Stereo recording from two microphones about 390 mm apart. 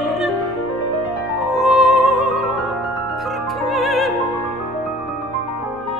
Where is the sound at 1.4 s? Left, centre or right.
Centre.